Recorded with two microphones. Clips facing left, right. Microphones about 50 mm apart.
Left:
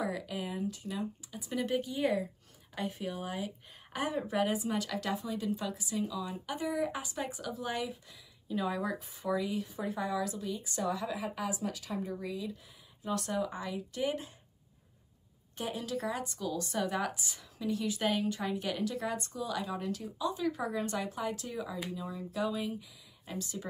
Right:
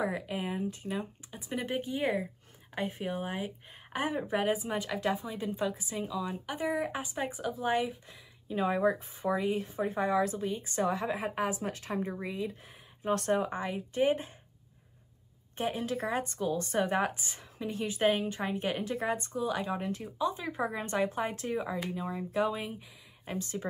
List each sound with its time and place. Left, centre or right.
0.0 s speech: right
15.5 s speech: right